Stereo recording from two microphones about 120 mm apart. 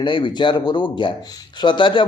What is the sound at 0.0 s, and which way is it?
A man's voice, 40° left (ahead or behind).